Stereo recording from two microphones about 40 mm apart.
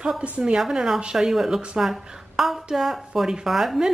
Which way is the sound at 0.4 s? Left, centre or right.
Centre.